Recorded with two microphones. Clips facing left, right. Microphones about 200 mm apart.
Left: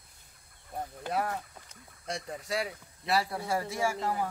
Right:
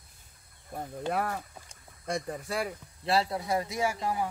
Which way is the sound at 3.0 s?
25° right (ahead or behind).